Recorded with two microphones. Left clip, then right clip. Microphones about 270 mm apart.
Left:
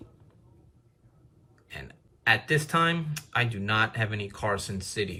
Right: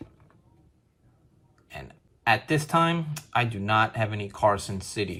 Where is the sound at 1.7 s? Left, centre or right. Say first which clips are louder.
Right 1 dB; centre.